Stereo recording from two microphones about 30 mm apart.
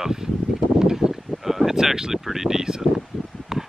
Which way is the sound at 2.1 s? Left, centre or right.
Centre.